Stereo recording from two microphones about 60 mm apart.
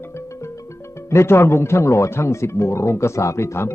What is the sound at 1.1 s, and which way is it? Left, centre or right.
Speech, left.